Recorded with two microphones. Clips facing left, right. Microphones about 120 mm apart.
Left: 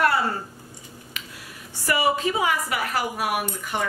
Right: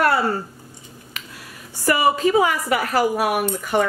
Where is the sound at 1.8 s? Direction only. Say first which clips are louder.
Right 5 dB; 50° right (ahead or behind).